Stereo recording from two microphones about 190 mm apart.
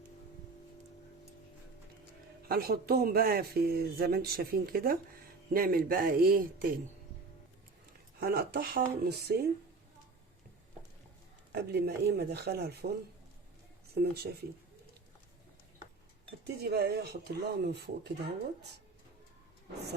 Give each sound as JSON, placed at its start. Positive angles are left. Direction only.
{"t": 2.5, "sound": "speech", "side_deg": -55}
{"t": 8.2, "sound": "speech", "side_deg": -55}
{"t": 11.5, "sound": "speech", "side_deg": -55}
{"t": 13.9, "sound": "speech", "side_deg": -55}
{"t": 16.4, "sound": "speech", "side_deg": -55}